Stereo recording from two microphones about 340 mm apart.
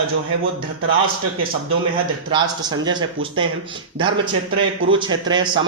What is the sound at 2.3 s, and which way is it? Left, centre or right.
Mantra, centre.